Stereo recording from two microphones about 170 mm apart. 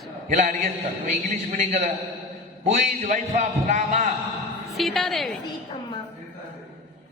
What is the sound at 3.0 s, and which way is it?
A man's voice, 50° right (ahead or behind).